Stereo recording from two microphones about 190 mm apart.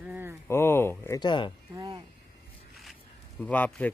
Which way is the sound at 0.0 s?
10° right (ahead or behind).